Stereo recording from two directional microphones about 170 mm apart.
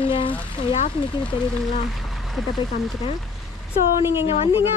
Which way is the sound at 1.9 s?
Centre (ahead or behind).